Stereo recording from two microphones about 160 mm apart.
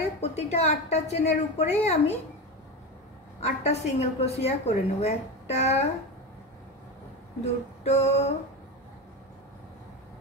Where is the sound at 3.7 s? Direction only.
40° left (ahead or behind).